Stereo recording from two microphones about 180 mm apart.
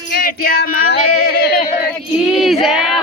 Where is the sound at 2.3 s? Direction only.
Centre (ahead or behind).